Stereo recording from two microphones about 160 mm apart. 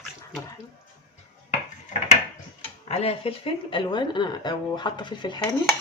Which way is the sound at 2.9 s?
40° left (ahead or behind).